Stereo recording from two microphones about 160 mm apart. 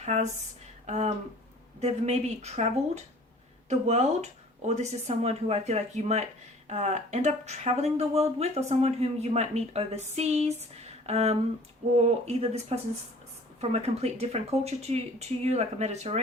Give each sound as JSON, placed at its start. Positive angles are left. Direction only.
{"t": 0.0, "sound": "speech", "side_deg": -45}
{"t": 0.9, "sound": "a sound", "side_deg": -45}
{"t": 1.8, "sound": "speech", "side_deg": -45}